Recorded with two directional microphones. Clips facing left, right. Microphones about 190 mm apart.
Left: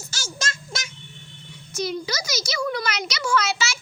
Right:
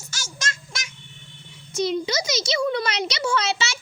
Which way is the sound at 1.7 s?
25° right (ahead or behind).